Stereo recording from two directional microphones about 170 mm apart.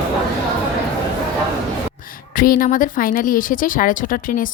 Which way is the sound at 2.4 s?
55° left (ahead or behind).